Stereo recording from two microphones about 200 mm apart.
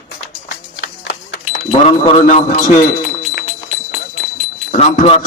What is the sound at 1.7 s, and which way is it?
A man's voice, 30° left (ahead or behind).